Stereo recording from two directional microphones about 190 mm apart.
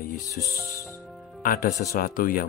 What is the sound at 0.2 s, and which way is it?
Speech, 15° left (ahead or behind).